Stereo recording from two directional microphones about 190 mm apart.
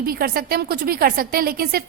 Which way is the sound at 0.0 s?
50° right (ahead or behind).